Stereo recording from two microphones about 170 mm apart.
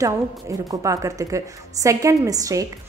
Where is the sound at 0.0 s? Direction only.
20° right (ahead or behind).